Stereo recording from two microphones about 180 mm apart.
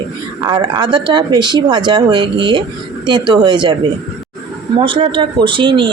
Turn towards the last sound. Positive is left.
turn(degrees=-25)  # may be behind; listen again after turning